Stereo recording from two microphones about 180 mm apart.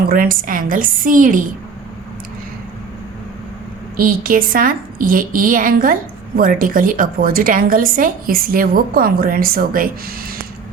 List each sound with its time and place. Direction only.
0.1 s a woman's voice: 50° right (ahead or behind)
3.9 s a woman's voice: 50° right (ahead or behind)